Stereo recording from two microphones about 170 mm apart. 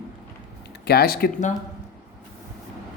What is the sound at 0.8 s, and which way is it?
Speech, 65° left (ahead or behind).